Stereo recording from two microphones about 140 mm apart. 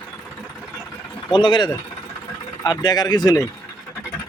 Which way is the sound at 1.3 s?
35° left (ahead or behind).